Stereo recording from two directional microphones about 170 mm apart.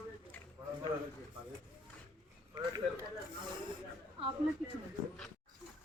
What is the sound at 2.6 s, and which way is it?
Speech, 25° right (ahead or behind).